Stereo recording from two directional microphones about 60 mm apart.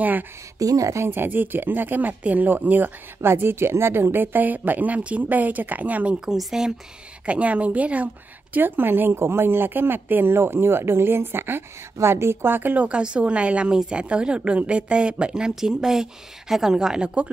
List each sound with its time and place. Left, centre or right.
0.0 s speech: right
0.6 s a woman's voice: right
1.0 s speech: right
3.2 s speech: right
6.2 s speech: centre
7.2 s speech: right
8.5 s speech: right
12.8 s speech: centre